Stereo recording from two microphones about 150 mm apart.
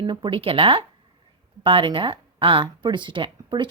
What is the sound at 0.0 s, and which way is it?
Speech, 30° right (ahead or behind).